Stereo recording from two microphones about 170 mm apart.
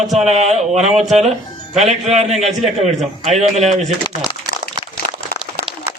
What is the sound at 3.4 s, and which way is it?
Speech, 40° right (ahead or behind).